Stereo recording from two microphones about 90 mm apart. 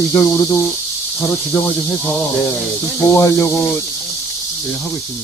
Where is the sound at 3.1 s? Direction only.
30° left (ahead or behind).